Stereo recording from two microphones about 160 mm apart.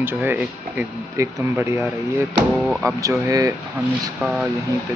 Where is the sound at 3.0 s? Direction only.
20° right (ahead or behind).